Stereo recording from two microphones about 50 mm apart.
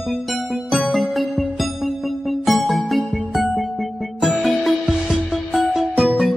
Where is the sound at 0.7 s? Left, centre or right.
Centre.